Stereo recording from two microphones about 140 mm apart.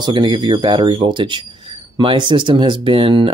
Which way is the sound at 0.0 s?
35° right (ahead or behind).